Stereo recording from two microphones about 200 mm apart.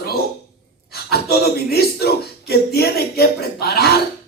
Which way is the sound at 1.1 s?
55° left (ahead or behind).